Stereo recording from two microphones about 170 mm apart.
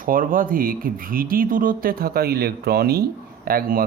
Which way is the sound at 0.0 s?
55° right (ahead or behind).